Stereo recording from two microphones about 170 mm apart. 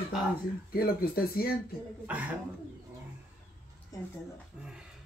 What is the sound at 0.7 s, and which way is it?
Speech, 60° left (ahead or behind).